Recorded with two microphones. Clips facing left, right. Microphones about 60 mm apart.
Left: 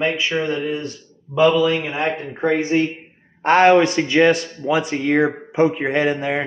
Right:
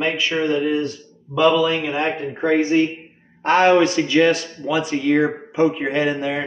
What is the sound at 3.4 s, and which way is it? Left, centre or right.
A man's voice, left.